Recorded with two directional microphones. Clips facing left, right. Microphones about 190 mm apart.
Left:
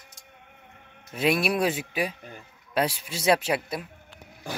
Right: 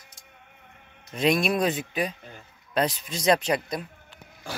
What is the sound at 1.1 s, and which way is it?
A man's voice, 5° left (ahead or behind).